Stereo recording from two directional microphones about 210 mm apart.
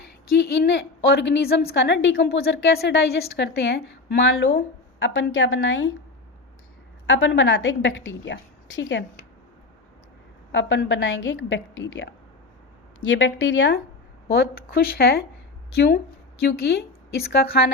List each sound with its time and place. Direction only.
0.3 s a woman's voice: 55° left (ahead or behind)
7.1 s a woman's voice: 60° left (ahead or behind)
10.5 s a woman's voice: 65° left (ahead or behind)
13.1 s a woman's voice: 60° left (ahead or behind)
14.3 s a woman's voice: 50° left (ahead or behind)
16.5 s a woman's voice: 50° left (ahead or behind)